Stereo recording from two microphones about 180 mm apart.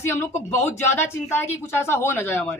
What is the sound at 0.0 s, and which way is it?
Speech, 15° left (ahead or behind).